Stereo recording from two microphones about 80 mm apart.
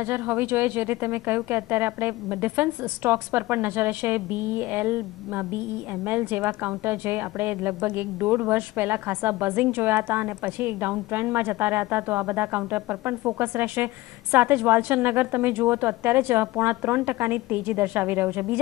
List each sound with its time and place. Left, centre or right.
0.0 s a woman's voice: right